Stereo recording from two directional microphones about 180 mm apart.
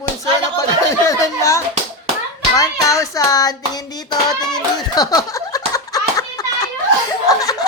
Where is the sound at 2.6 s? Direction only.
20° left (ahead or behind).